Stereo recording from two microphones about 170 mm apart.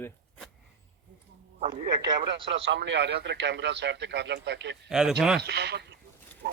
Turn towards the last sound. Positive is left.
turn(degrees=-90)